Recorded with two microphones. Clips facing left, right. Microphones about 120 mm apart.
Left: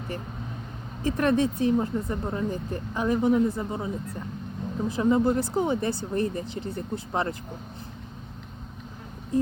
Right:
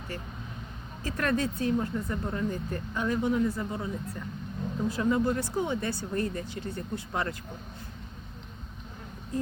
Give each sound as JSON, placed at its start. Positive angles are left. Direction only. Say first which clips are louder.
{"t": 1.0, "sound": "speech", "louder": "left 6 dB", "side_deg": 20}